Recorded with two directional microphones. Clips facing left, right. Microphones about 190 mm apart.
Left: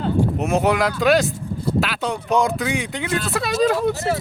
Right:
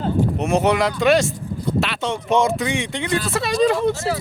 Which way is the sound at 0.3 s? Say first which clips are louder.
Right 1 dB; centre (ahead or behind).